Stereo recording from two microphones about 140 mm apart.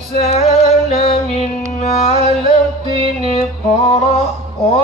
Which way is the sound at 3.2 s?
50° left (ahead or behind).